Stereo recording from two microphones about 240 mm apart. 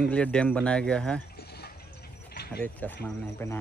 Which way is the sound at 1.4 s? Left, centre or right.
Left.